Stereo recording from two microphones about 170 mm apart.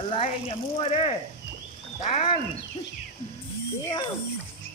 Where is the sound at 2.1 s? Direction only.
35° left (ahead or behind).